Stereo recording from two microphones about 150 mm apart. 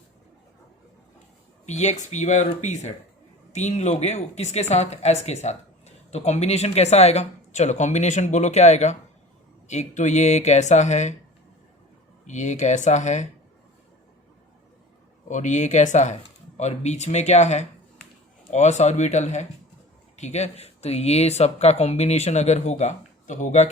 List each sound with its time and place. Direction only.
1.6 s speech: 50° left (ahead or behind)
12.2 s speech: 55° left (ahead or behind)
15.3 s speech: 55° left (ahead or behind)